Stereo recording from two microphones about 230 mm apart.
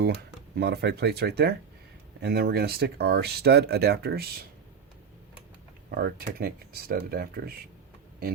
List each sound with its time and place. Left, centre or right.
0.5 s speech: right
5.9 s speech: right